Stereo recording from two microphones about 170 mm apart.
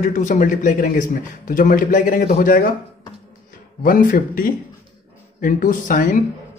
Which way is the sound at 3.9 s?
50° left (ahead or behind).